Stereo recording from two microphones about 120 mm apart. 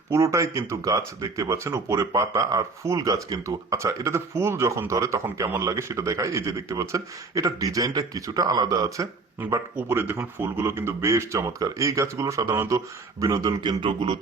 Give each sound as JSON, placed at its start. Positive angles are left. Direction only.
{"t": 0.1, "sound": "speech", "side_deg": -25}
{"t": 9.4, "sound": "speech", "side_deg": -20}